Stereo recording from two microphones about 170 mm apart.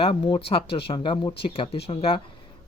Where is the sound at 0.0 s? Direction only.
30° left (ahead or behind).